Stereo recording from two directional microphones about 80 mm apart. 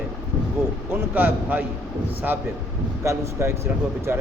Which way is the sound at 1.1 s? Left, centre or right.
Right.